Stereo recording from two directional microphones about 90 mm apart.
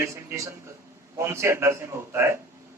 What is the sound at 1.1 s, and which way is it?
Speech, 30° right (ahead or behind).